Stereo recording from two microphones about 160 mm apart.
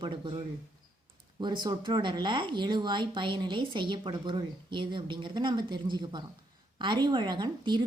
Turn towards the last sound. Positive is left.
turn(degrees=-30)  # may be behind; listen again after turning